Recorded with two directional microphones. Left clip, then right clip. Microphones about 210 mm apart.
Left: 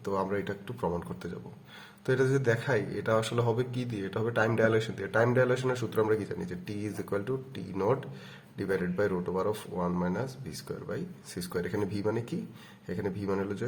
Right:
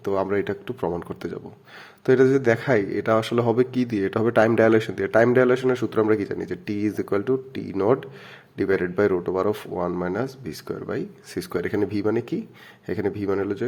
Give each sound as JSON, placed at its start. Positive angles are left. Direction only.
{"t": 0.0, "sound": "speech", "side_deg": -35}